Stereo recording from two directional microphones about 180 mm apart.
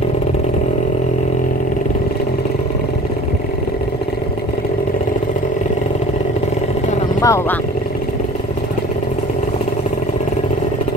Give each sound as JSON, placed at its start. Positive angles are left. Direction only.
{"t": 7.2, "sound": "vehicle", "side_deg": 15}